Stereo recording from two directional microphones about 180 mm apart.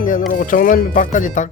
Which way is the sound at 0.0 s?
45° left (ahead or behind).